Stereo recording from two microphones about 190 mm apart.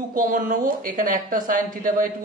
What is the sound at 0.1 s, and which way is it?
Speech, 45° right (ahead or behind).